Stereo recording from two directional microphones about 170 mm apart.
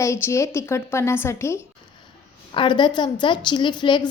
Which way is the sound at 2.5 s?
30° left (ahead or behind).